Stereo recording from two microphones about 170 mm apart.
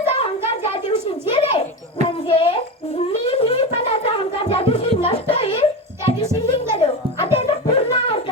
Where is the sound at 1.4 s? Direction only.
35° left (ahead or behind).